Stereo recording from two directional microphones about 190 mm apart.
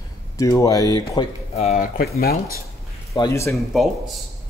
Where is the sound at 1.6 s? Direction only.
40° left (ahead or behind).